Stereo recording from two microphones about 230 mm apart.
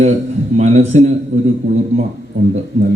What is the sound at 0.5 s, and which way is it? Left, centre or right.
Speech, right.